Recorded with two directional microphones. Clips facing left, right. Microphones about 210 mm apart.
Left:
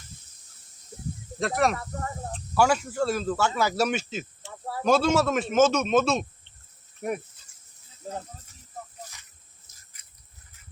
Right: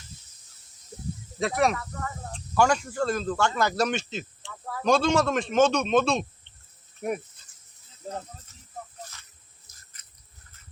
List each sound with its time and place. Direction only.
1.4 s a man's voice: centre (ahead or behind)
1.7 s speech: 35° left (ahead or behind)
2.3 s a man's voice: 5° left (ahead or behind)
9.7 s a sound: 25° left (ahead or behind)